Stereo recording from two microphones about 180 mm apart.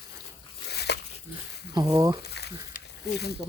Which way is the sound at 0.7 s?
65° left (ahead or behind).